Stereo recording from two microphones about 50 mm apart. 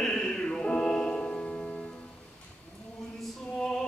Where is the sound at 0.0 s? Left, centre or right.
Centre.